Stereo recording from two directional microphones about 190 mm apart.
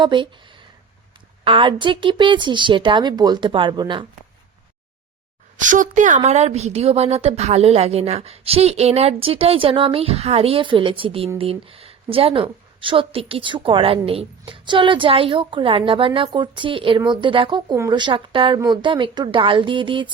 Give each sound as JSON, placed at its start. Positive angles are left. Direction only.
{"t": 0.0, "sound": "speech", "side_deg": -25}
{"t": 5.5, "sound": "a woman's voice", "side_deg": -45}